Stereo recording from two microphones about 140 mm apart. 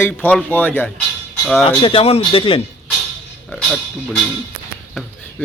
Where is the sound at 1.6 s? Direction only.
40° left (ahead or behind).